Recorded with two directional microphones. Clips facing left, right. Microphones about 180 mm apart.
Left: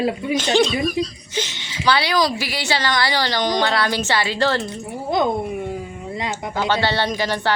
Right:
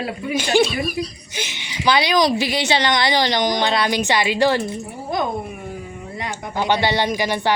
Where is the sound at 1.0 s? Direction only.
25° left (ahead or behind).